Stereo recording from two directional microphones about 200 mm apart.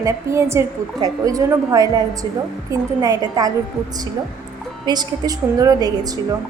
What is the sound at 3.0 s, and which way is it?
Speech, 20° right (ahead or behind).